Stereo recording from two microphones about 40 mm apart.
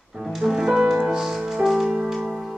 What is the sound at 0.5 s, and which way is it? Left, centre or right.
Music, centre.